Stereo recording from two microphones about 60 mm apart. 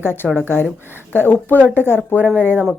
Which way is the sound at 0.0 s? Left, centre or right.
Left.